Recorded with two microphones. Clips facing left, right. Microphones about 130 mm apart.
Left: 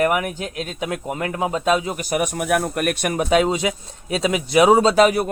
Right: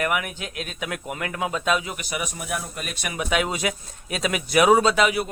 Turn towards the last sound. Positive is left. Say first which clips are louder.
# left 5 dB
turn(degrees=40)  # may be behind; listen again after turning